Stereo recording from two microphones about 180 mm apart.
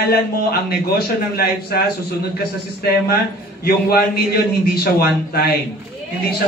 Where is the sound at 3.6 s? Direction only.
60° left (ahead or behind).